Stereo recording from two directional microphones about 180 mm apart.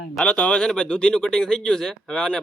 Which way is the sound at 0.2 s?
5° left (ahead or behind).